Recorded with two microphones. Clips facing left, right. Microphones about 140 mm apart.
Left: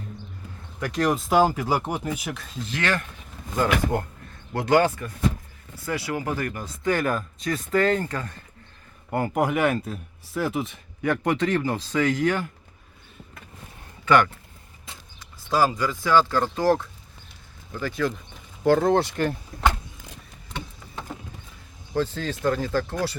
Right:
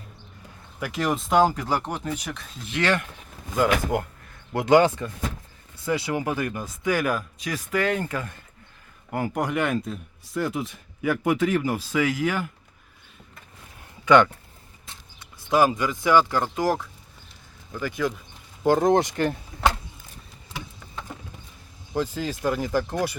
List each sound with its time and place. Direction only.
0.8 s speech: 5° right (ahead or behind)
2.6 s speech: 20° right (ahead or behind)
4.5 s speech: 20° right (ahead or behind)
6.8 s speech: 5° right (ahead or behind)
14.0 s speech: 20° right (ahead or behind)
15.4 s speech: 20° right (ahead or behind)
21.9 s speech: 10° right (ahead or behind)